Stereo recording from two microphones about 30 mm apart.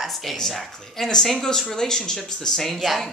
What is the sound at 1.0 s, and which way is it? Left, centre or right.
Speech, centre.